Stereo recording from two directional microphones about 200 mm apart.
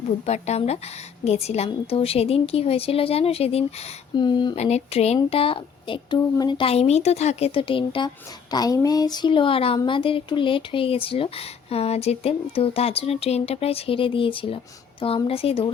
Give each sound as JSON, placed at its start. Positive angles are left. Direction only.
{"t": 0.3, "sound": "speech", "side_deg": 35}